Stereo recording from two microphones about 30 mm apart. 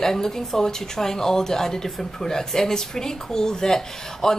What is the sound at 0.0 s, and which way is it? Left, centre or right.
Speech, centre.